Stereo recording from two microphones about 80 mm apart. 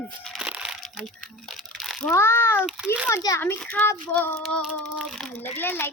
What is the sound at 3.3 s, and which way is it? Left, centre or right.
Speech, left.